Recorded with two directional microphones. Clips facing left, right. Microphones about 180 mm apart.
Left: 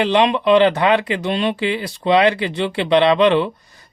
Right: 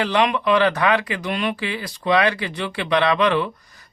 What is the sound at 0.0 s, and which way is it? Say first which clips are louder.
Speech: left 4 dB; 25° left (ahead or behind).